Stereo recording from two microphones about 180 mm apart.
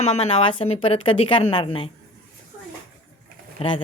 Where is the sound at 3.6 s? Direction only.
30° left (ahead or behind).